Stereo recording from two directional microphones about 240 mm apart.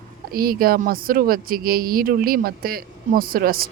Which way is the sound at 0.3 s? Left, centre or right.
Right.